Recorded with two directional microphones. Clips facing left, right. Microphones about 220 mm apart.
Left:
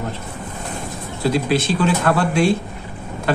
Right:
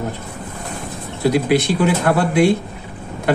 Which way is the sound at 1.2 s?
15° right (ahead or behind).